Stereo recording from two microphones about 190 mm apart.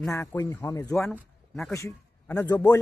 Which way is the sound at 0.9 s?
5° left (ahead or behind).